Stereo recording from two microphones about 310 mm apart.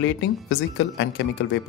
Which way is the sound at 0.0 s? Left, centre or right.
Left.